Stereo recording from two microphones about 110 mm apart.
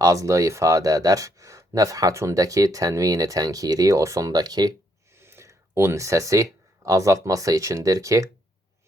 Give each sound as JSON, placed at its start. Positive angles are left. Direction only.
{"t": 0.0, "sound": "speech", "side_deg": -30}
{"t": 5.1, "sound": "speech", "side_deg": -25}